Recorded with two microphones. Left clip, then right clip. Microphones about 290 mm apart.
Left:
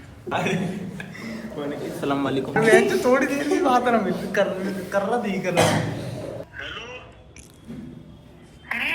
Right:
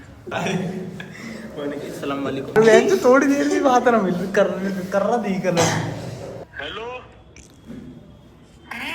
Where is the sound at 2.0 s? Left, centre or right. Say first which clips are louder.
Left 2 dB; centre.